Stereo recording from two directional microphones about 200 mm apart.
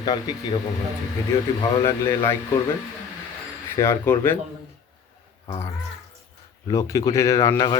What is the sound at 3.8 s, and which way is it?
Speech, 10° left (ahead or behind).